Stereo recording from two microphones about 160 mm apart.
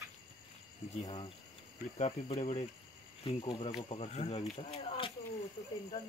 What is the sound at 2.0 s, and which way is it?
Speech, 45° left (ahead or behind).